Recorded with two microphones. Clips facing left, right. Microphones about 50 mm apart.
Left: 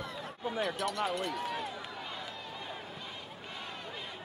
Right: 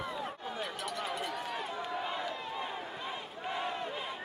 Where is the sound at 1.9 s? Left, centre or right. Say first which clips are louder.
Right 6 dB; centre.